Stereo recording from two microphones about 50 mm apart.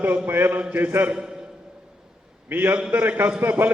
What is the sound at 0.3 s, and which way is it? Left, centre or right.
Speech, right.